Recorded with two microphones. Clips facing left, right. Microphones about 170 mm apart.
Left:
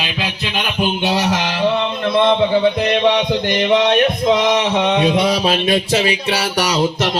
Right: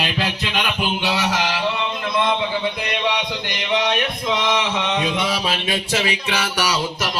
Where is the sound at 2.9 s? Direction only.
50° left (ahead or behind).